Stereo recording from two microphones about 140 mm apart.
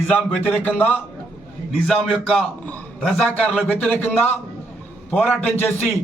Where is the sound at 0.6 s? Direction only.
15° left (ahead or behind).